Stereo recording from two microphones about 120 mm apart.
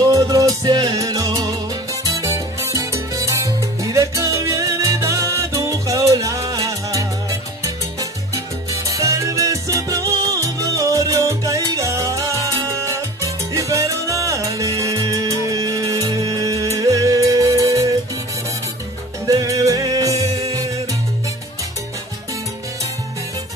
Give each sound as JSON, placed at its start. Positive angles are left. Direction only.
{"t": 0.0, "sound": "music", "side_deg": -30}
{"t": 19.2, "sound": "music", "side_deg": -30}